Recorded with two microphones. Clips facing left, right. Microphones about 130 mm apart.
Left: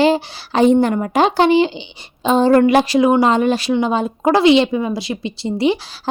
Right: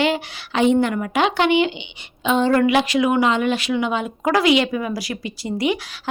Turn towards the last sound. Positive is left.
turn(degrees=30)  # may be behind; listen again after turning